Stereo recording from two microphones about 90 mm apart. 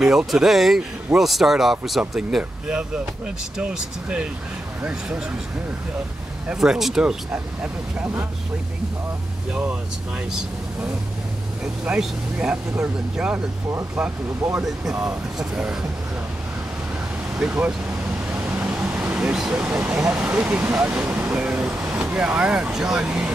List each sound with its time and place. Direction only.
0.0 s speech: 5° right (ahead or behind)
6.5 s speech: 5° right (ahead or behind)
7.6 s speech: 20° right (ahead or behind)
11.6 s speech: 10° right (ahead or behind)
14.6 s speech: 5° right (ahead or behind)
17.4 s speech: 15° right (ahead or behind)
18.4 s vehicle: 15° right (ahead or behind)
19.1 s speech: 5° right (ahead or behind)